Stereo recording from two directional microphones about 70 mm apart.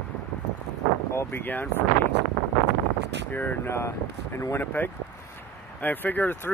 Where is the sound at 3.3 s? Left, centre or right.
Left.